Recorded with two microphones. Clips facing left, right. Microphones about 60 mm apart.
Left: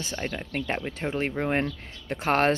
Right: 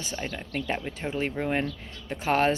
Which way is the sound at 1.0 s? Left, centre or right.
Left.